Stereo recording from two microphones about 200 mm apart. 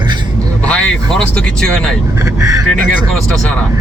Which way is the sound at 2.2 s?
15° right (ahead or behind).